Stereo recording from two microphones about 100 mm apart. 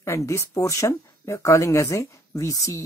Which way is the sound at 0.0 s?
30° left (ahead or behind).